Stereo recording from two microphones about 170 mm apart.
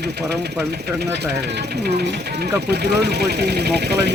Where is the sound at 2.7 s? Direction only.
75° right (ahead or behind).